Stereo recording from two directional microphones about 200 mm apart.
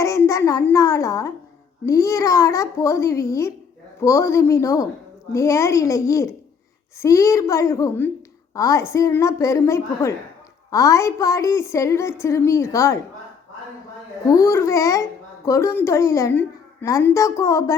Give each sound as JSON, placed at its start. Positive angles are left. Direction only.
{"t": 0.0, "sound": "a woman's voice", "side_deg": 15}
{"t": 14.3, "sound": "a woman's voice", "side_deg": 15}